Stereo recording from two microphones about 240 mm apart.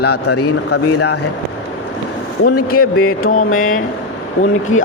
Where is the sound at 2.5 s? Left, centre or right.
Left.